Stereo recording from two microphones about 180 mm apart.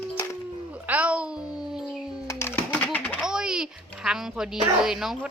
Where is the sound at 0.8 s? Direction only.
10° right (ahead or behind).